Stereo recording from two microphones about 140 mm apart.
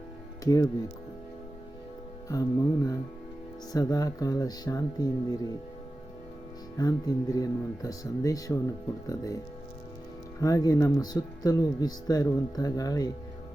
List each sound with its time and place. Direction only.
0.4 s speech: 25° left (ahead or behind)
2.3 s speech: 25° left (ahead or behind)
6.7 s speech: 25° left (ahead or behind)
10.4 s speech: 25° left (ahead or behind)